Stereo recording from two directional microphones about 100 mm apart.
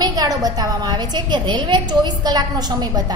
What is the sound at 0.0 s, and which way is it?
A woman's voice, 40° right (ahead or behind).